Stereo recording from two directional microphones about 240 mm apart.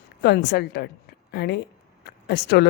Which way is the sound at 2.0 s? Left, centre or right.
Left.